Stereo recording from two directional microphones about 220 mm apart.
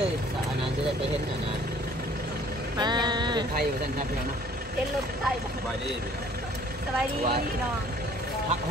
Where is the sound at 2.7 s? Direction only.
20° right (ahead or behind).